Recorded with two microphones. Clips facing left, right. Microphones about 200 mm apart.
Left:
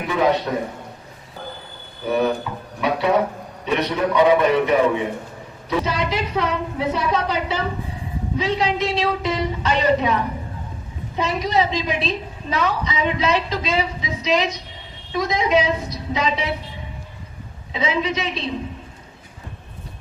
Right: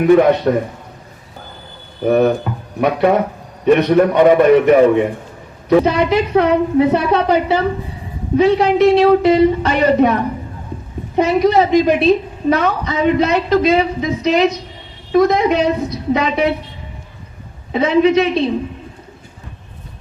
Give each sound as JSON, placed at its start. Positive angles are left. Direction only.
{"t": 0.5, "sound": "a man's voice", "side_deg": -55}
{"t": 2.0, "sound": "a man's voice", "side_deg": -55}
{"t": 11.2, "sound": "a woman's voice", "side_deg": -55}
{"t": 17.7, "sound": "a woman's voice", "side_deg": -60}